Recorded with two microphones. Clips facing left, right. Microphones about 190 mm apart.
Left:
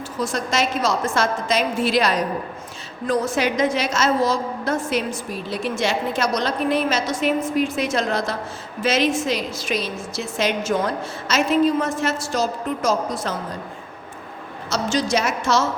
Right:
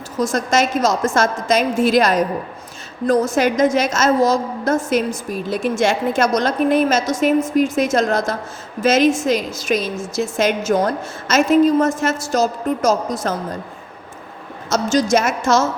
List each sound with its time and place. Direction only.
0.2 s a woman's voice: 45° right (ahead or behind)
14.7 s a woman's voice: 45° right (ahead or behind)